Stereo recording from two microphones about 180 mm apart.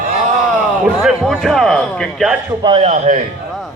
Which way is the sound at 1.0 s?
Centre (ahead or behind).